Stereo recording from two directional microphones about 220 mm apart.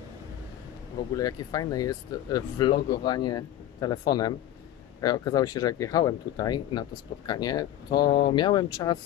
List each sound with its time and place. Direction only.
0.9 s speech: 15° left (ahead or behind)
5.0 s speech: 20° left (ahead or behind)